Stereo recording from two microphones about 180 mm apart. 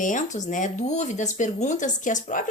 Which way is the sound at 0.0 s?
45° left (ahead or behind).